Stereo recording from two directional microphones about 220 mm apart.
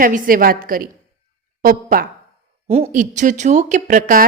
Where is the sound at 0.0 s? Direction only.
40° right (ahead or behind).